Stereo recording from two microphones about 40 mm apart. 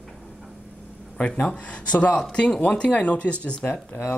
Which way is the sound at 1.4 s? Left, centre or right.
Left.